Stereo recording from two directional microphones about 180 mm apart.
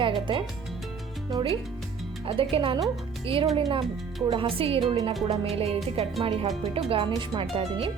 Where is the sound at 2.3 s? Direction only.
30° right (ahead or behind).